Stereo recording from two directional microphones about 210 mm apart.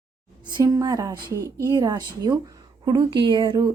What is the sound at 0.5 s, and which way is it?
A woman's voice, 15° right (ahead or behind).